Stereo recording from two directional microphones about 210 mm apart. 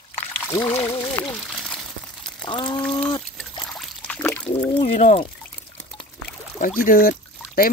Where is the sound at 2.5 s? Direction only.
20° left (ahead or behind).